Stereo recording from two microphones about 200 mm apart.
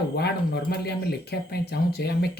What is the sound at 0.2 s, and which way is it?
Speech, 55° left (ahead or behind).